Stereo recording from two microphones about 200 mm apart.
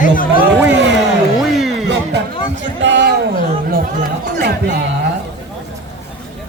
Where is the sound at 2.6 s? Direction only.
60° right (ahead or behind).